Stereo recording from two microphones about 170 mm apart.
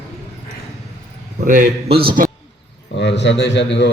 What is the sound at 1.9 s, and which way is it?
Speech, 60° right (ahead or behind).